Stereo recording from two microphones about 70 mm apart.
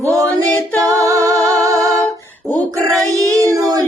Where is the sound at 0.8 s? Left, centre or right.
Right.